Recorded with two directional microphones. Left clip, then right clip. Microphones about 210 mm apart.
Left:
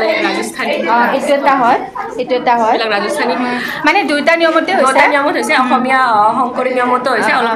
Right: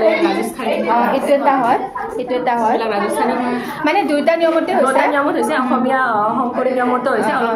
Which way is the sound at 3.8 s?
5° left (ahead or behind).